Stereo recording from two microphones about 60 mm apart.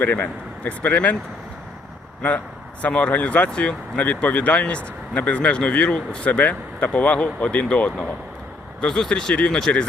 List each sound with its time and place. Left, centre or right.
0.0 s speech: left
2.8 s speech: left